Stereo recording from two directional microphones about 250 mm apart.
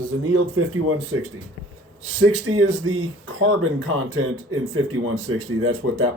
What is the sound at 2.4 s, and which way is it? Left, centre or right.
Speech, right.